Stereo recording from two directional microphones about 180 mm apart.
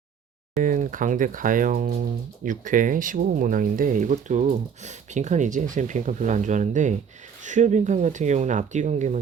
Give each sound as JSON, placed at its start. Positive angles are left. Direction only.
{"t": 0.6, "sound": "speech", "side_deg": -45}